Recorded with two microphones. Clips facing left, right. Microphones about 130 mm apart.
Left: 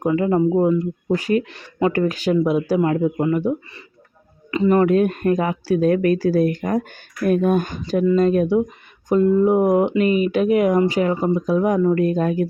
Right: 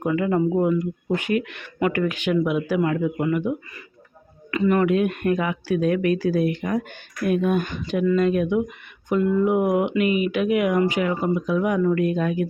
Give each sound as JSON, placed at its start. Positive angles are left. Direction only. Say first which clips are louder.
{"t": 0.0, "sound": "speech", "louder": "left 3 dB", "side_deg": 30}
{"t": 4.5, "sound": "speech", "louder": "left 4 dB", "side_deg": 30}